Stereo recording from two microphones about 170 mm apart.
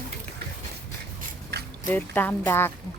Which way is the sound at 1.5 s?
70° right (ahead or behind).